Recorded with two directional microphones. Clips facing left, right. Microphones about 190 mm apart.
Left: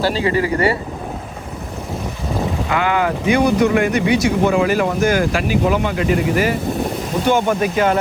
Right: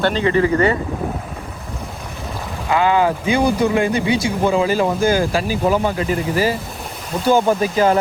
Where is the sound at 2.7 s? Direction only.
30° right (ahead or behind).